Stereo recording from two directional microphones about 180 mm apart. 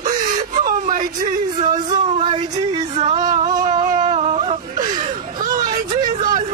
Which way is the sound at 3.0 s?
40° right (ahead or behind).